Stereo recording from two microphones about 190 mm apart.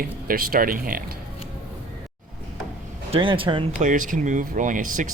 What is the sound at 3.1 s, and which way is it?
Speech, 25° right (ahead or behind).